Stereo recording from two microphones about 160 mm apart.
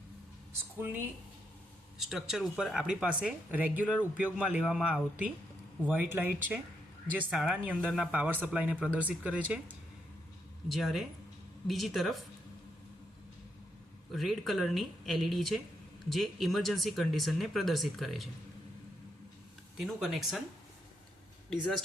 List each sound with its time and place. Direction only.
0.8 s speech: 15° right (ahead or behind)
2.0 s speech: centre (ahead or behind)
14.1 s speech: centre (ahead or behind)
19.8 s speech: centre (ahead or behind)
21.5 s speech: centre (ahead or behind)